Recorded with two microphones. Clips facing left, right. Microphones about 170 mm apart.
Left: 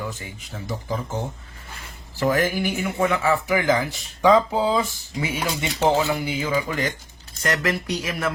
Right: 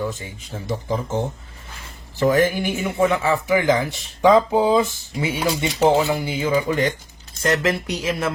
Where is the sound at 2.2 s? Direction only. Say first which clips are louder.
Right 4 dB; 20° right (ahead or behind).